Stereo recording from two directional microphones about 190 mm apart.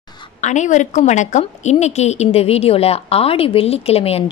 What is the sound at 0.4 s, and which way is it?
A woman's voice, 40° left (ahead or behind).